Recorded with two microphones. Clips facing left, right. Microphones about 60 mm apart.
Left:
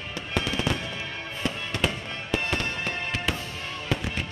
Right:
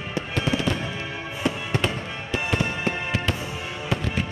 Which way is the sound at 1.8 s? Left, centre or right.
Centre.